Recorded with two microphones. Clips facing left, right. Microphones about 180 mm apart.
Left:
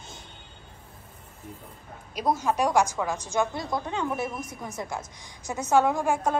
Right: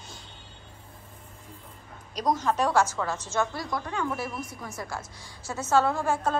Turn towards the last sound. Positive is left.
turn(degrees=15)  # may be behind; listen again after turning